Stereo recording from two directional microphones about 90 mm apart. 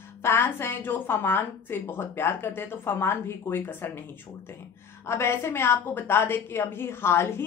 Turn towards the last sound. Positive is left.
turn(degrees=30)  # may be behind; listen again after turning